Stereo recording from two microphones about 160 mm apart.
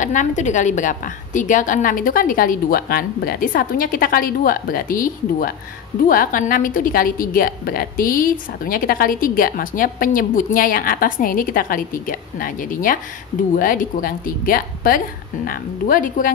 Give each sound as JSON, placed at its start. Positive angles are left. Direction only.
{"t": 0.0, "sound": "a woman's voice", "side_deg": 50}